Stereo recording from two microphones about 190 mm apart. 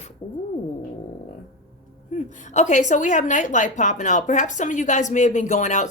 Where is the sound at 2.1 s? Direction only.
40° left (ahead or behind).